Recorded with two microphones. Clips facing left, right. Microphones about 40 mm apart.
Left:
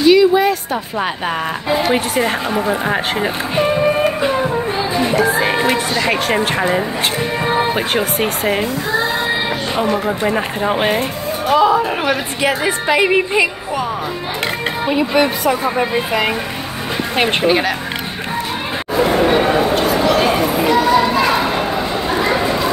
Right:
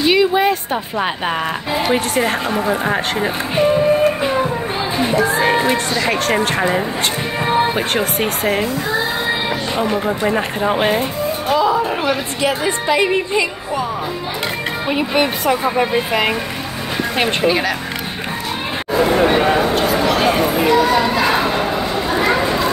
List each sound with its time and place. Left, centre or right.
0.0 s a sound: centre
1.9 s speech: centre
5.3 s speech: centre
10.0 s speech: centre
11.5 s speech: centre
15.0 s speech: right
15.6 s speech: centre
17.5 s speech: left
18.9 s a sound: centre